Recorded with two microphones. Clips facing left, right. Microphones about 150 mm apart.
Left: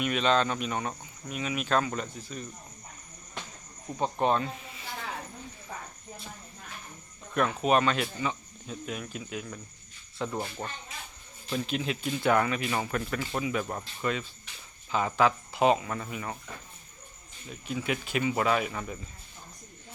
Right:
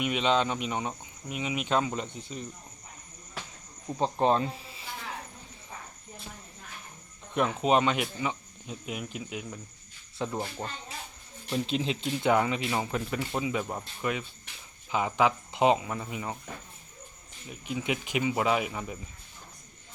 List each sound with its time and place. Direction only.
0.0 s speech: 15° right (ahead or behind)
4.0 s speech: 30° right (ahead or behind)
7.3 s speech: 20° right (ahead or behind)
17.5 s speech: 15° right (ahead or behind)